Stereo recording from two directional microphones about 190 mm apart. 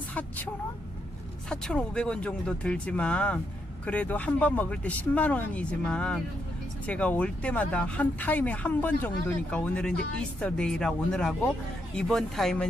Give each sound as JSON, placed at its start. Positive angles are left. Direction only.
{"t": 0.1, "sound": "vehicle", "side_deg": 10}
{"t": 1.5, "sound": "speech", "side_deg": 5}